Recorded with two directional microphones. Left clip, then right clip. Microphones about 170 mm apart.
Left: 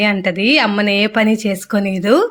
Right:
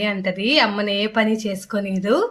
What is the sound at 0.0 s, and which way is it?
Speech, 45° left (ahead or behind).